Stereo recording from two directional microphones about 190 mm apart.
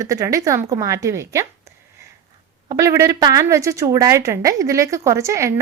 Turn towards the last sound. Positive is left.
turn(degrees=-15)  # may be behind; listen again after turning